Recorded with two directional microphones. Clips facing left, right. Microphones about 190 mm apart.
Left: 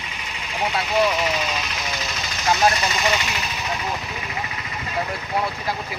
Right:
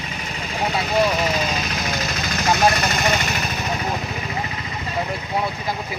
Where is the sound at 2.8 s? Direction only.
50° right (ahead or behind).